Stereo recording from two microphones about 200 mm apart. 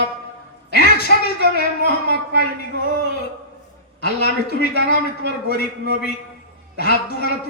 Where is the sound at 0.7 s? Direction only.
50° left (ahead or behind).